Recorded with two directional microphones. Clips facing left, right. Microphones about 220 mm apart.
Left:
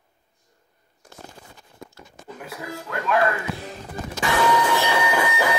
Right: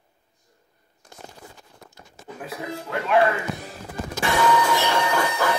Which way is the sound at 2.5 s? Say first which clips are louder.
Right 3 dB; 25° right (ahead or behind).